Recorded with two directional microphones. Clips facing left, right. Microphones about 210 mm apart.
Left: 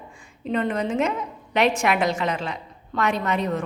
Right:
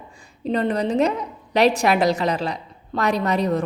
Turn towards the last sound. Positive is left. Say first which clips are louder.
# right 4 dB
turn(degrees=-35)  # may be behind; listen again after turning